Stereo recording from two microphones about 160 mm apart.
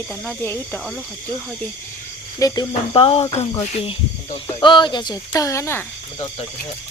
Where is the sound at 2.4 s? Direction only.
25° left (ahead or behind).